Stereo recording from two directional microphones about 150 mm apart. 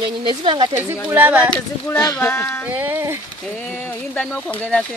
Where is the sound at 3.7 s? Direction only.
10° left (ahead or behind).